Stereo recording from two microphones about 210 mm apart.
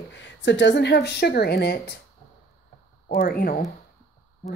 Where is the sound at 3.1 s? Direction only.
45° left (ahead or behind).